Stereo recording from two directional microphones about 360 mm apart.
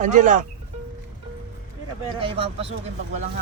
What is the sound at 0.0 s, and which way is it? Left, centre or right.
Speech, centre.